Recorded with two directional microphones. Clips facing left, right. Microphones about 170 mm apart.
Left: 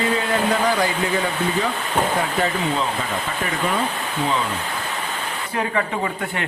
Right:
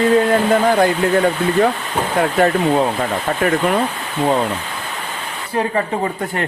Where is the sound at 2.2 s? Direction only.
55° right (ahead or behind).